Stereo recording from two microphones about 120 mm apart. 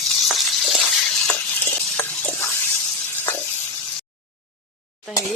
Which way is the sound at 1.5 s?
20° left (ahead or behind).